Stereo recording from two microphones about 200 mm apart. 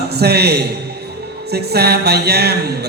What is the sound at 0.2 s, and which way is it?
A man's voice, 55° right (ahead or behind).